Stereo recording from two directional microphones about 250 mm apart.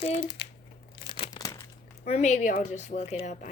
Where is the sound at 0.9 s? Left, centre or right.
Centre.